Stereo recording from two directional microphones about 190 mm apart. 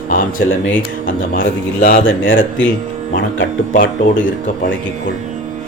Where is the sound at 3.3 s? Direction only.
50° left (ahead or behind).